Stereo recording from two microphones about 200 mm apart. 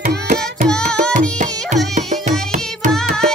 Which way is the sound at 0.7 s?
5° left (ahead or behind).